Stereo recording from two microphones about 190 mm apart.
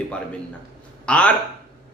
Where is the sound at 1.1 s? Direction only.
5° left (ahead or behind).